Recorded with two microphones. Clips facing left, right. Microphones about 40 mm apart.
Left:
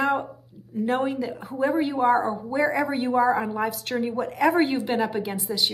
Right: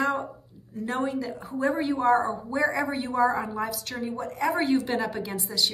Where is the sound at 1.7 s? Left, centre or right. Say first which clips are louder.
Left 3 dB; centre.